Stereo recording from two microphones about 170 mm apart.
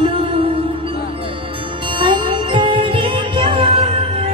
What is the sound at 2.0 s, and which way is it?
Music, 30° right (ahead or behind).